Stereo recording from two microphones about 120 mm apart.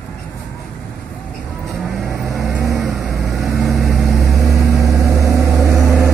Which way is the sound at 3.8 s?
Centre (ahead or behind).